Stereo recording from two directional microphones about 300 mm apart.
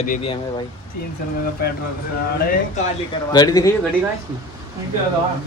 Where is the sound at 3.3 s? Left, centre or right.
Centre.